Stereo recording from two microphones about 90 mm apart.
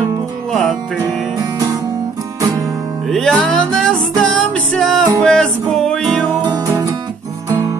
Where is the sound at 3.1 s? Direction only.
5° left (ahead or behind).